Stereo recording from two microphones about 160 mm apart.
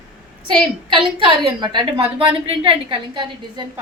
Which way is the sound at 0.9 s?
35° right (ahead or behind).